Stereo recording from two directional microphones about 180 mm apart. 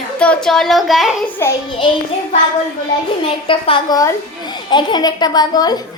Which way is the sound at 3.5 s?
30° left (ahead or behind).